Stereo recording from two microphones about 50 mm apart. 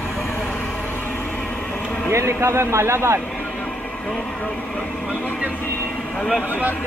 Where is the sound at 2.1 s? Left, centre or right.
Right.